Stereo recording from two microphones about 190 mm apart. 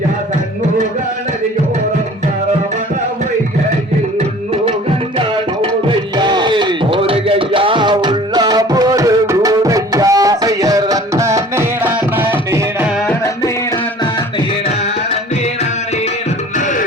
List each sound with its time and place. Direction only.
6.1 s music: 25° right (ahead or behind)
13.1 s music: 15° left (ahead or behind)
16.6 s music: 40° left (ahead or behind)